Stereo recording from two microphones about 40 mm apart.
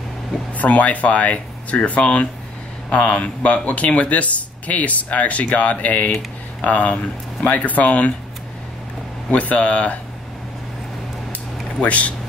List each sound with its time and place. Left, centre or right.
0.5 s speech: left
9.3 s speech: left
11.8 s speech: left